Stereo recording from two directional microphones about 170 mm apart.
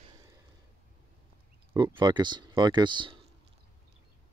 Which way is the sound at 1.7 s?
25° right (ahead or behind).